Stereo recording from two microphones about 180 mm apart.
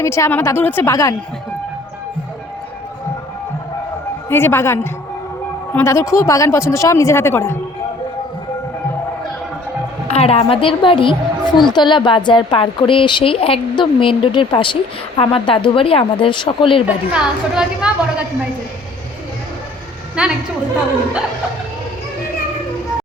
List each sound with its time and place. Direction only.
0.0 s speech: 15° left (ahead or behind)
4.3 s speech: 15° left (ahead or behind)
10.1 s a woman's voice: 35° left (ahead or behind)
16.8 s a woman's voice: 5° right (ahead or behind)
20.2 s a woman's voice: 5° right (ahead or behind)